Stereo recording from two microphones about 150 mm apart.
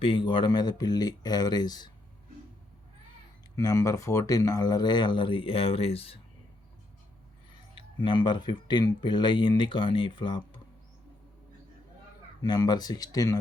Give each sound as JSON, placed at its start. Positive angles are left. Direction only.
{"t": 0.0, "sound": "speech", "side_deg": 35}
{"t": 3.5, "sound": "speech", "side_deg": 25}
{"t": 7.8, "sound": "speech", "side_deg": 35}
{"t": 12.4, "sound": "speech", "side_deg": 25}